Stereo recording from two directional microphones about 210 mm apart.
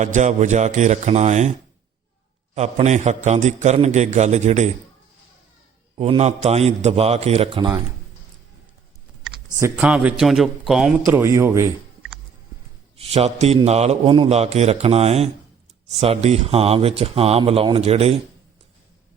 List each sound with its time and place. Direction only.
0.0 s a man's voice: 35° right (ahead or behind)
2.6 s a man's voice: 35° right (ahead or behind)
6.0 s a man's voice: 30° right (ahead or behind)
9.6 s a man's voice: 10° right (ahead or behind)
11.1 s speech: 15° right (ahead or behind)
13.0 s a man's voice: 30° right (ahead or behind)